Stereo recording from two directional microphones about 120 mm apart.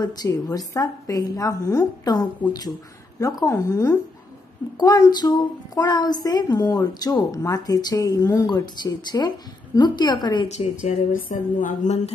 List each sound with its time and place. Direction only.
0.0 s a woman's voice: 30° left (ahead or behind)
10.6 s speech: 65° left (ahead or behind)
11.3 s speech: 90° left